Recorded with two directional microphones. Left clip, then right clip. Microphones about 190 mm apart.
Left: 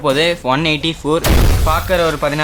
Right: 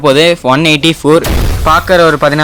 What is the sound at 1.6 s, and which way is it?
Speech, 45° right (ahead or behind).